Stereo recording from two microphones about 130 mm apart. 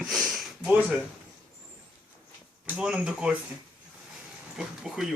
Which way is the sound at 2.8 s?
5° right (ahead or behind).